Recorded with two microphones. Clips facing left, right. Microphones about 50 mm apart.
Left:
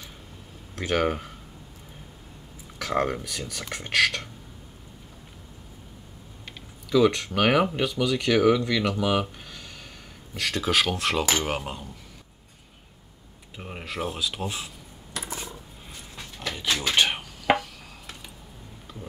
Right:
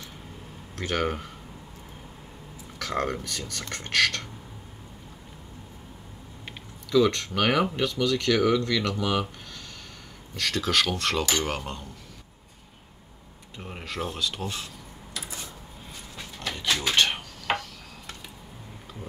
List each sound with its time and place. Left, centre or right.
0.7 s speech: centre
2.8 s speech: centre
6.9 s speech: centre
13.6 s speech: centre
15.1 s cutlery: left
16.3 s dishes: centre